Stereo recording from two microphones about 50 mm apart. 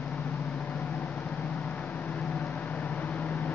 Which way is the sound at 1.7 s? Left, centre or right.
Left.